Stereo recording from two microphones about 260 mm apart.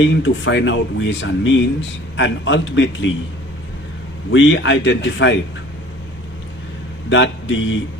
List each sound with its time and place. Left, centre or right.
0.0 s speech: left
4.3 s speech: left
7.1 s speech: left